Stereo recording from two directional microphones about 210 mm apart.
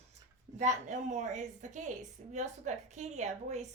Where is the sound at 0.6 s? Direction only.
35° right (ahead or behind).